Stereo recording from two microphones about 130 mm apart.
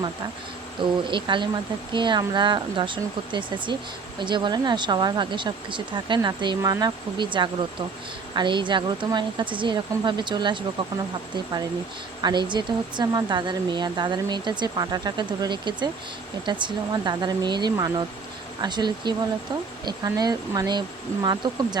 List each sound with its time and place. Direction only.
0.8 s speech: 40° right (ahead or behind)
12.2 s speech: 35° right (ahead or behind)